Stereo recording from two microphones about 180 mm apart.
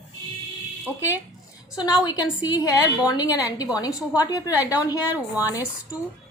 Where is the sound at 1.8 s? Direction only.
20° left (ahead or behind).